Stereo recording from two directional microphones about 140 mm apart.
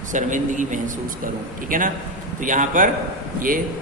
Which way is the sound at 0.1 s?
65° right (ahead or behind).